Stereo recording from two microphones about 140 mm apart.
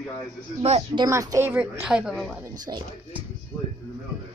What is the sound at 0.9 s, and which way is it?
Speech, 25° right (ahead or behind).